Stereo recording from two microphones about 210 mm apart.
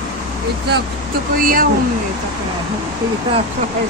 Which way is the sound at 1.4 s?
45° right (ahead or behind).